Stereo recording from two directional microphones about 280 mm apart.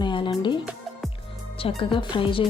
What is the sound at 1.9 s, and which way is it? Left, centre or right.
Speech, centre.